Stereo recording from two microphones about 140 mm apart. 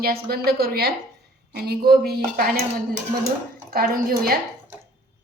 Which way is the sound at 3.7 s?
90° right.